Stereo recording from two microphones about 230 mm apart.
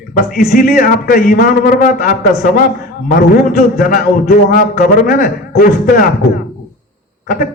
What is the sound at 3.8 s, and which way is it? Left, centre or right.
A man's voice, left.